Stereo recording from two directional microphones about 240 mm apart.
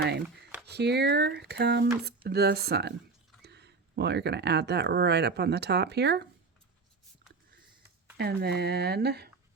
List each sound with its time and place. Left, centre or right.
0.0 s speech: right
8.2 s speech: right